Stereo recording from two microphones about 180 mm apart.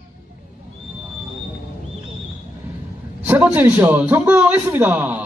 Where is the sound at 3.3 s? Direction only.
10° right (ahead or behind).